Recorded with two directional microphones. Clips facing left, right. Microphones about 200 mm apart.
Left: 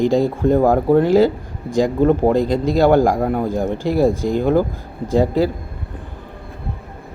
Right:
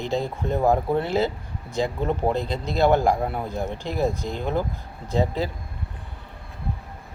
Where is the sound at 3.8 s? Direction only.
10° left (ahead or behind).